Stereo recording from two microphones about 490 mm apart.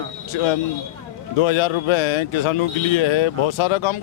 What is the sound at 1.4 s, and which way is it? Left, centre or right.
A man's voice, left.